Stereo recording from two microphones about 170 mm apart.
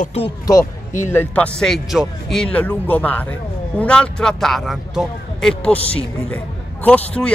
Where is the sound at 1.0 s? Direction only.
15° left (ahead or behind).